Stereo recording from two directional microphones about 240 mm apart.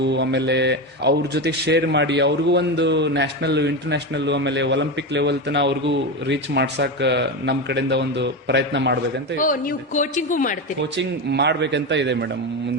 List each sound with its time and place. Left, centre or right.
0.0 s speech: right
9.4 s a woman's voice: left
10.9 s speech: right